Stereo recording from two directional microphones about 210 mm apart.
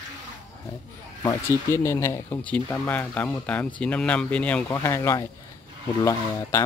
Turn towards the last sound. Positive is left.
turn(degrees=15)  # may be behind; listen again after turning